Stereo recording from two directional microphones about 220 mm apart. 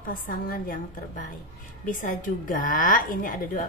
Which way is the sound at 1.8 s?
35° left (ahead or behind).